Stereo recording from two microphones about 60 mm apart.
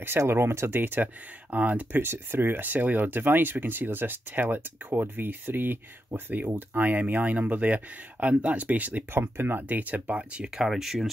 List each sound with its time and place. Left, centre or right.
0.3 s speech: right
9.1 s speech: right; by 11.1 s centre